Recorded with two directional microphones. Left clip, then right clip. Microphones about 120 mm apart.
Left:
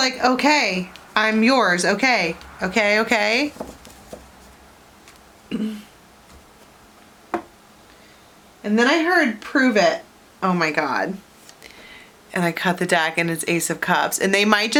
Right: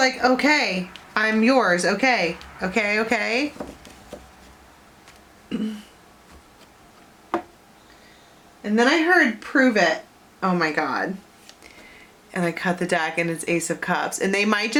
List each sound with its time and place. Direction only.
0.0 s a woman's voice: 20° left (ahead or behind)
8.6 s a woman's voice: 20° left (ahead or behind)
12.3 s a woman's voice: 30° left (ahead or behind)